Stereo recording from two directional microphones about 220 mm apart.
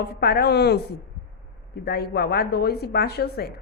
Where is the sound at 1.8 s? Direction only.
45° left (ahead or behind).